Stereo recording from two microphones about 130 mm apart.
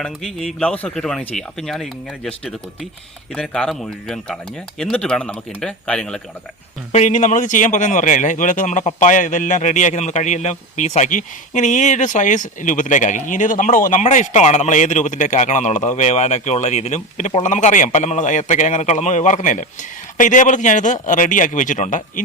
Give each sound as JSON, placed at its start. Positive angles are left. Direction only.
{"t": 0.0, "sound": "speech", "side_deg": 5}
{"t": 6.9, "sound": "a man's voice", "side_deg": 70}